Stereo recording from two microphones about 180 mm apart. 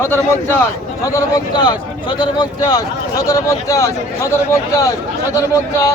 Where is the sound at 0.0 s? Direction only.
10° left (ahead or behind).